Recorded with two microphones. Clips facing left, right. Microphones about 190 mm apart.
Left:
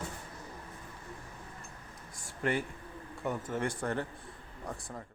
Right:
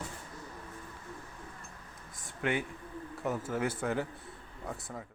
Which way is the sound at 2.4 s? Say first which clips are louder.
Even; centre (ahead or behind).